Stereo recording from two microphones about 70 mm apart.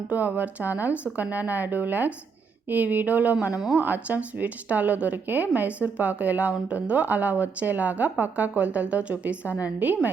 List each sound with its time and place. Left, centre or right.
0.1 s speech: right